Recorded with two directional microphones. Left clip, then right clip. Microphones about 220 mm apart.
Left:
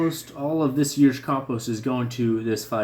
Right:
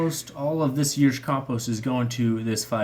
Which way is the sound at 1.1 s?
45° right (ahead or behind).